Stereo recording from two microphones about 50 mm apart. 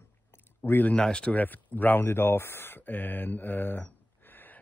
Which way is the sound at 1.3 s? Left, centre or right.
Left.